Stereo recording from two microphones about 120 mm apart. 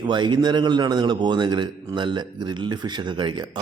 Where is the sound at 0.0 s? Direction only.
40° right (ahead or behind).